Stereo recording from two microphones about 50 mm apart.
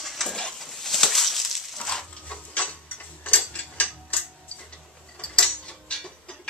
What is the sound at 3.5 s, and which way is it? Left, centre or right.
Mechanisms, left.